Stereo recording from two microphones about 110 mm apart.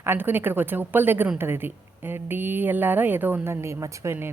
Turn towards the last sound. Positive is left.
turn(degrees=-20)  # may be behind; listen again after turning